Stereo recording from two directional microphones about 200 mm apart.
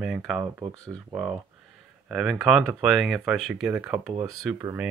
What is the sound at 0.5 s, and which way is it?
Speech, 15° right (ahead or behind).